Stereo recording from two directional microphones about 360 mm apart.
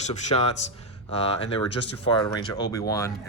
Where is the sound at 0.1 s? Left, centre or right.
Centre.